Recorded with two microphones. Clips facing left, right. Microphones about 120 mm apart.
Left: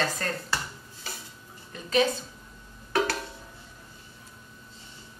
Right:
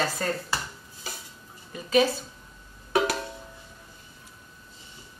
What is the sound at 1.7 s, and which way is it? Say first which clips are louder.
Speech: right 3 dB; 5° right (ahead or behind).